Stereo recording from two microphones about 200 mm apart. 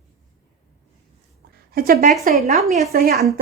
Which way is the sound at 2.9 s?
50° right (ahead or behind).